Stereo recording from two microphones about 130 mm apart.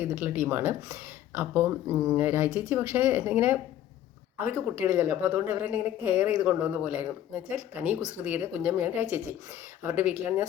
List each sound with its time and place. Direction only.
0.0 s speech: 15° right (ahead or behind)